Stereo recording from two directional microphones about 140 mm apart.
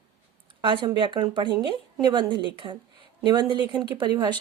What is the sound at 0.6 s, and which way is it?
Speech, 35° right (ahead or behind).